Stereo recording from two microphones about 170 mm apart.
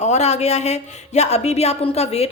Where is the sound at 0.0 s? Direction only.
40° left (ahead or behind).